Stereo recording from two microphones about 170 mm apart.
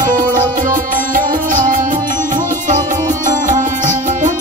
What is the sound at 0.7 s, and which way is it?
Music, 50° right (ahead or behind).